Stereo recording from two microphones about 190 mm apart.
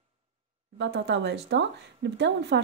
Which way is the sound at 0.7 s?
65° right (ahead or behind).